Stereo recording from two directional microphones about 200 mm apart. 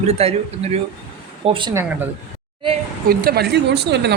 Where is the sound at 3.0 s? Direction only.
50° right (ahead or behind).